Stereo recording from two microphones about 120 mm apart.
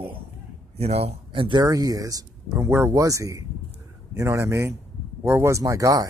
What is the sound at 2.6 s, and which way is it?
Speech, 15° right (ahead or behind).